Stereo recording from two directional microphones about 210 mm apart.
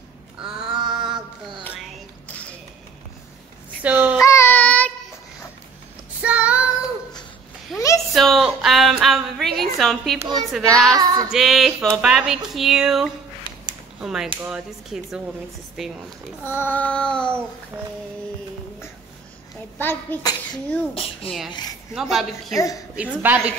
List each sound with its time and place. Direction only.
0.4 s crow: 5° right (ahead or behind)
0.9 s a sound: 5° right (ahead or behind)
3.8 s a sound: 10° right (ahead or behind)
4.2 s baby cry: 15° left (ahead or behind)
6.2 s child singing: 5° right (ahead or behind)
7.7 s a sound: centre (ahead or behind)
10.1 s a child's voice: 20° right (ahead or behind)
10.5 s speech: centre (ahead or behind)
10.9 s a woman's voice: 15° right (ahead or behind)
11.2 s speech: centre (ahead or behind)
16.4 s a child's voice: 10° left (ahead or behind)
17.7 s a woman's voice: 10° right (ahead or behind)
19.8 s a child's voice: 10° left (ahead or behind)
22.1 s a woman's voice: centre (ahead or behind)